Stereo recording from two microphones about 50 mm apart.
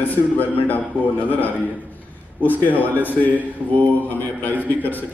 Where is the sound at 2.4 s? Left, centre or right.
Left.